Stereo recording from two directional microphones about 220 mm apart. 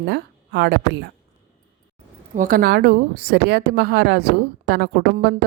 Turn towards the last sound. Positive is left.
turn(degrees=-50)  # may be behind; listen again after turning